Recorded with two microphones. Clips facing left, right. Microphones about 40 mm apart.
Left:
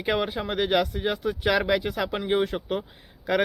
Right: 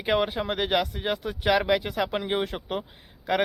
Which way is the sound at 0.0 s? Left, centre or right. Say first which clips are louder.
Right 1 dB; centre.